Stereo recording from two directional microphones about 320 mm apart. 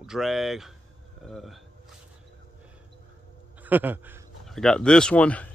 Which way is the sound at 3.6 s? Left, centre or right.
Centre.